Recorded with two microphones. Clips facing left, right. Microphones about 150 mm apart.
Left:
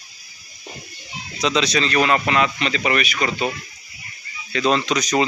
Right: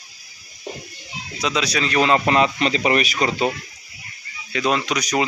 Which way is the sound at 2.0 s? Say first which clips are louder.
Right 3 dB; 25° right (ahead or behind).